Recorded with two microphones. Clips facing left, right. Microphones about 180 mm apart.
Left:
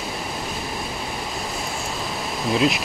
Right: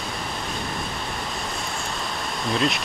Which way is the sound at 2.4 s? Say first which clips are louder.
Left 4 dB; 5° left (ahead or behind).